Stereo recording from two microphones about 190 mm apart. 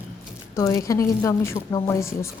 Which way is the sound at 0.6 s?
15° left (ahead or behind).